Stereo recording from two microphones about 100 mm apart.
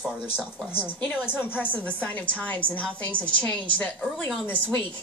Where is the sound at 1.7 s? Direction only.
15° left (ahead or behind).